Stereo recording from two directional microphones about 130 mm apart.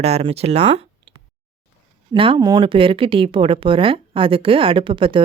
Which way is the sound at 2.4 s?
30° right (ahead or behind).